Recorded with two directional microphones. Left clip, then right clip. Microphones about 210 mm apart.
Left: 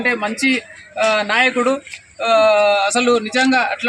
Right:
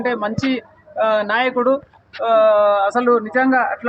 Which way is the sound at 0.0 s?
30° left (ahead or behind).